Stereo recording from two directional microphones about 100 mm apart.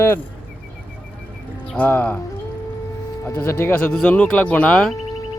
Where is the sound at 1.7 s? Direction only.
20° left (ahead or behind).